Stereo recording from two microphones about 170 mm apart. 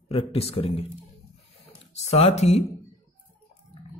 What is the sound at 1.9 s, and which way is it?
Speech, 40° left (ahead or behind).